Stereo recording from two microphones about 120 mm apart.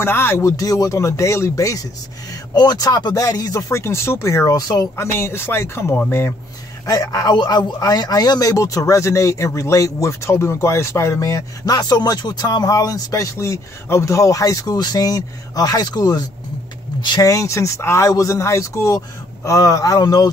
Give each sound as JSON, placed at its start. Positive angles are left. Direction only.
{"t": 0.0, "sound": "a man's voice", "side_deg": 20}
{"t": 6.9, "sound": "a man's voice", "side_deg": 30}
{"t": 17.3, "sound": "a man's voice", "side_deg": 25}